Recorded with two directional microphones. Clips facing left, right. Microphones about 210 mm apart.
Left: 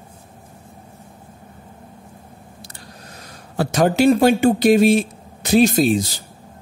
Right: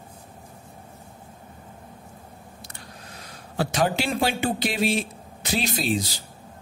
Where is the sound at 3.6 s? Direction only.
45° left (ahead or behind).